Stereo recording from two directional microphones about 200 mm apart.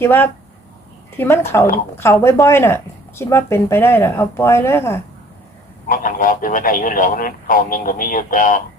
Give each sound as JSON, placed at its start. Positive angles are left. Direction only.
{"t": 0.0, "sound": "a woman's voice", "side_deg": 10}
{"t": 5.9, "sound": "speech", "side_deg": 40}